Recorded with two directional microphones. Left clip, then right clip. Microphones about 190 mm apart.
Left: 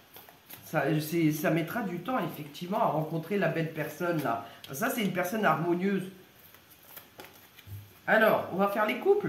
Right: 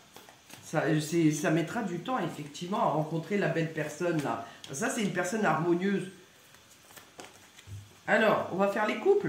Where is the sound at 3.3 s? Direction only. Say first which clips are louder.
Left 1 dB; 20° left (ahead or behind).